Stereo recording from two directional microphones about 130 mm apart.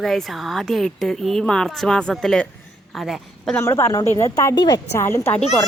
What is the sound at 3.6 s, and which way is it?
A woman's voice, 20° left (ahead or behind).